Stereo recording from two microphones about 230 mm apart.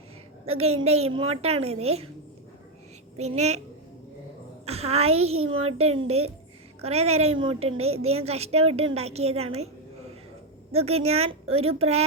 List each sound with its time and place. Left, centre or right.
0.4 s a woman's voice: right
3.2 s a woman's voice: right
4.6 s a woman's voice: right
10.7 s a woman's voice: right